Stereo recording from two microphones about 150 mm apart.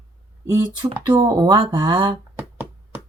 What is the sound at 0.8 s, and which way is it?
Speech, 25° right (ahead or behind).